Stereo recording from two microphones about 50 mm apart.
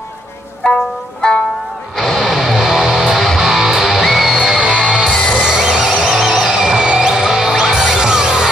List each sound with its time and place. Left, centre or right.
1.2 s music: centre
2.0 s music: centre
3.2 s music: centre
5.1 s music: centre
5.4 s music: centre